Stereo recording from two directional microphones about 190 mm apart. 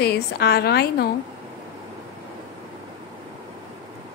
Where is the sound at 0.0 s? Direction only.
60° left (ahead or behind).